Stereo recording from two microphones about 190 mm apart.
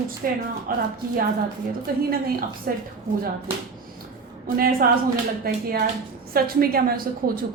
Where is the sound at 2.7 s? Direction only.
50° right (ahead or behind).